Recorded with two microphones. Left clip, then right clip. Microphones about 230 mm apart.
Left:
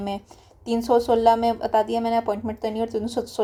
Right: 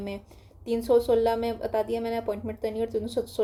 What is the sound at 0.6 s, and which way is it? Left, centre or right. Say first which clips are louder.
Speech: left 2 dB; left.